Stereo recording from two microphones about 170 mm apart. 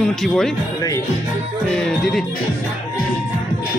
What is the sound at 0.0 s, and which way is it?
Speech, 5° left (ahead or behind).